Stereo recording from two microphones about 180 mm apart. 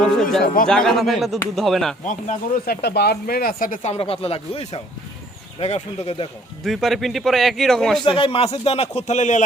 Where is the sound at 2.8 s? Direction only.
65° left (ahead or behind); by 6.3 s 35° left (ahead or behind).